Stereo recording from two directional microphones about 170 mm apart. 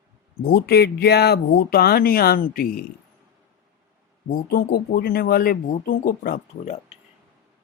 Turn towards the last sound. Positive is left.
turn(degrees=35)  # may be behind; listen again after turning